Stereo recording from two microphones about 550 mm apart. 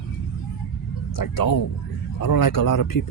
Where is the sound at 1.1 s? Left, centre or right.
Left.